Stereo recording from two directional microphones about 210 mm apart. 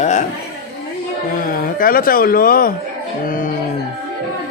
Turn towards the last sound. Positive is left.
turn(degrees=40)  # may be behind; listen again after turning